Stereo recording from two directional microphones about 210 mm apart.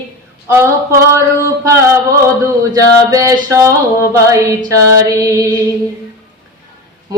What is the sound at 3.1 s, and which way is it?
Female singing, 15° right (ahead or behind).